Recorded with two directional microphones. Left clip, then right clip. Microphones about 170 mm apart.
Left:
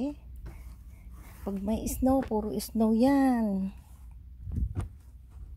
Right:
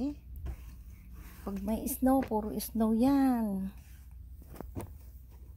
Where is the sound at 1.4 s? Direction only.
35° left (ahead or behind).